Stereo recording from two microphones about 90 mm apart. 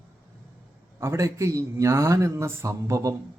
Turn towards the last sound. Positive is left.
turn(degrees=-35)  # may be behind; listen again after turning